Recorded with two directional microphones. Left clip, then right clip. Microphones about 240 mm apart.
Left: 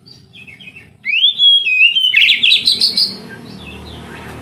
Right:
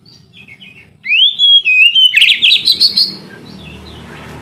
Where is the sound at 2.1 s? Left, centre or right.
Centre.